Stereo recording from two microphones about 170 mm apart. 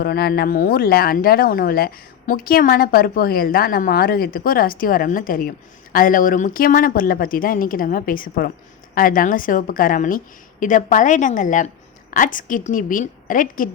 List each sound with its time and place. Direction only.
0.0 s a woman's voice: 70° left (ahead or behind); by 13.7 s 50° left (ahead or behind)